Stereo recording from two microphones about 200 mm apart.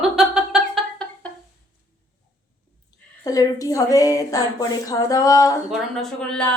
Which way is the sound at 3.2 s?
20° left (ahead or behind).